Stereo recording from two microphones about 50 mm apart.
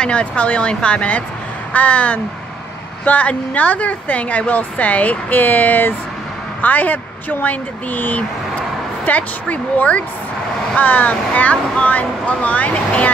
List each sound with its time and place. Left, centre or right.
0.0 s a woman's voice: left